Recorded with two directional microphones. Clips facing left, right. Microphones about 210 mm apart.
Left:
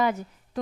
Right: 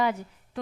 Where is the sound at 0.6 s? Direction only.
40° left (ahead or behind).